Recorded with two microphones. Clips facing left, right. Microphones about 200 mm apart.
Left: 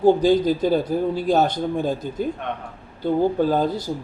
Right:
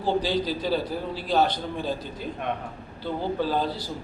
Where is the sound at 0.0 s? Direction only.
50° left (ahead or behind).